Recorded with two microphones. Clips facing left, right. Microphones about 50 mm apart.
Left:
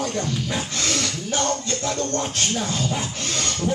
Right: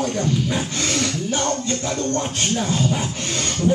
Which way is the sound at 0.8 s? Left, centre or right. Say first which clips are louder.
Right 3 dB; right.